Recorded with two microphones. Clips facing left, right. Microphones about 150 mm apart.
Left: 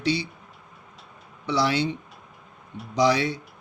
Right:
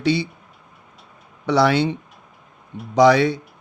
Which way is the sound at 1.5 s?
55° right (ahead or behind).